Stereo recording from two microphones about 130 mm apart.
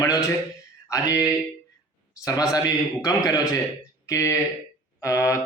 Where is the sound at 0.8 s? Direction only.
25° left (ahead or behind).